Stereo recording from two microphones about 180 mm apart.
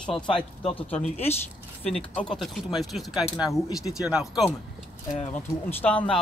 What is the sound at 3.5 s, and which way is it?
Speech, 20° left (ahead or behind).